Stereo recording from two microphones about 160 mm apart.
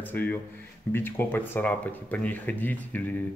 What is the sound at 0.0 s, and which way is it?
Speech, 10° left (ahead or behind).